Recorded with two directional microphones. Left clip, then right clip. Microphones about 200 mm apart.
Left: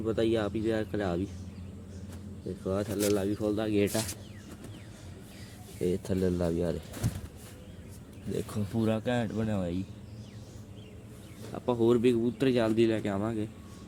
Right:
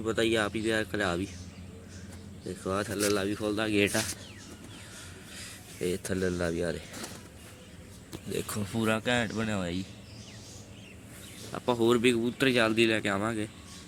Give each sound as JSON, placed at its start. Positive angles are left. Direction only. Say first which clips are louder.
{"t": 0.0, "sound": "speech", "louder": "right 1 dB", "side_deg": 5}
{"t": 2.6, "sound": "speech", "louder": "even", "side_deg": 5}
{"t": 5.8, "sound": "speech", "louder": "left 1 dB", "side_deg": 15}
{"t": 8.4, "sound": "speech", "louder": "even", "side_deg": 0}
{"t": 11.5, "sound": "a man's voice", "louder": "even", "side_deg": 0}